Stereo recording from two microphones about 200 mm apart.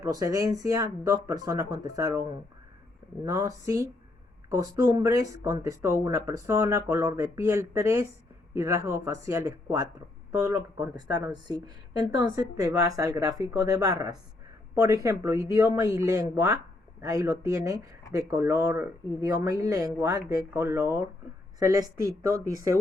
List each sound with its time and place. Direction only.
0.0 s speech: 15° right (ahead or behind)
3.2 s speech: 15° right (ahead or behind)